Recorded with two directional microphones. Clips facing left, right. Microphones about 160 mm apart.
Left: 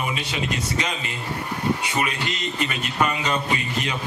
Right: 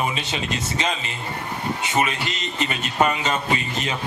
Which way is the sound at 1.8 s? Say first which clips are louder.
Right 2 dB; 25° right (ahead or behind).